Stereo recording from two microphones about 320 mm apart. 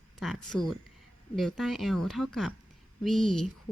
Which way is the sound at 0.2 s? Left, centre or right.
Centre.